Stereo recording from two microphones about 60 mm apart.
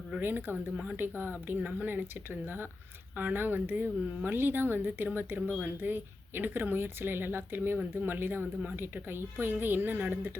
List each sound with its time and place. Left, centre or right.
0.2 s a woman's voice: right
3.2 s a woman's voice: right